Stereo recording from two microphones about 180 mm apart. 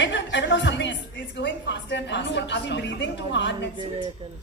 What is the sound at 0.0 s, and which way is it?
A woman's voice, 90° left.